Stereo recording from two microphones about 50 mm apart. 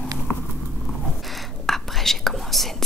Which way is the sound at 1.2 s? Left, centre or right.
Centre.